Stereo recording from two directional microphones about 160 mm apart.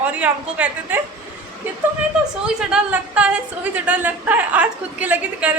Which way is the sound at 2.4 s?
5° right (ahead or behind).